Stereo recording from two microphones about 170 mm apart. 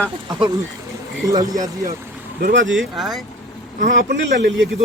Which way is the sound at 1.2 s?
20° right (ahead or behind).